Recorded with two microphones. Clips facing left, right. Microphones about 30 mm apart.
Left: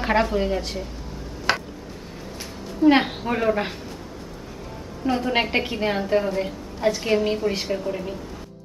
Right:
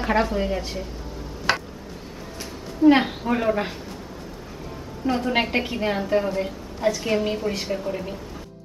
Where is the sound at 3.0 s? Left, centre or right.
Centre.